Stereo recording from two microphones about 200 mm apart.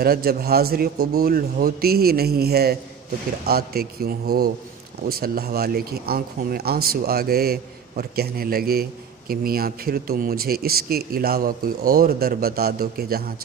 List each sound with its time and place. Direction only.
0.0 s speech: 50° right (ahead or behind)